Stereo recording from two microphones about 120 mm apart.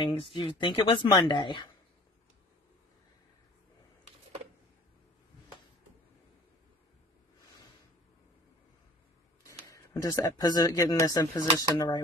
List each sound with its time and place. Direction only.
0.0 s speech: 45° left (ahead or behind)
9.7 s speech: 30° left (ahead or behind)